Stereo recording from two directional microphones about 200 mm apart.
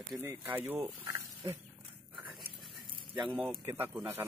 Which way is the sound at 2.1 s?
5° right (ahead or behind).